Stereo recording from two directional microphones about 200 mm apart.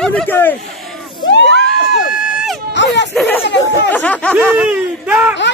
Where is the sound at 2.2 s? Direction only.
5° right (ahead or behind).